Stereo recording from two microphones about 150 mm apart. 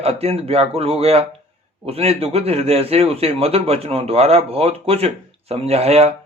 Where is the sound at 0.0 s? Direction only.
40° right (ahead or behind).